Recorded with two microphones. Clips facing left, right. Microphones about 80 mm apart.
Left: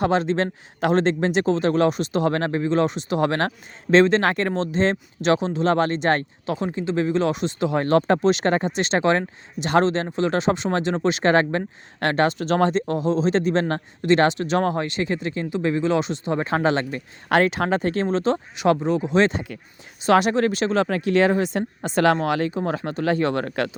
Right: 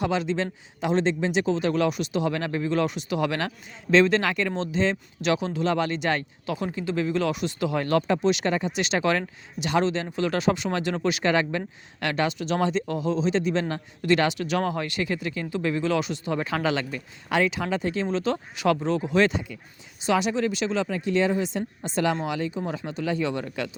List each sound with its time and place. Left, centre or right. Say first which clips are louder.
0.0 s speech: left 5 dB; left
4.2 s speech: left 4 dB; left
5.6 s speech: left 5 dB; left
14.2 s speech: left 5 dB; left
17.2 s speech: left 5 dB; left
18.5 s speech: left 2 dB; left
20.1 s speech: left 6 dB; left